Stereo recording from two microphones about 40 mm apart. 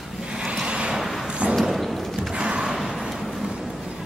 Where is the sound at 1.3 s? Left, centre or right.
Right.